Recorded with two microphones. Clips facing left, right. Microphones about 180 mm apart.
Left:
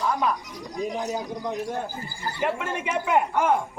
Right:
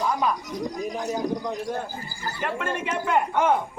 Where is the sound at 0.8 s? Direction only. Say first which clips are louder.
Left 7 dB; 25° left (ahead or behind).